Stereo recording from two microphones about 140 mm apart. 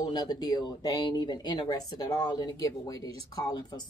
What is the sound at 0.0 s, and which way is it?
Speech, 30° left (ahead or behind).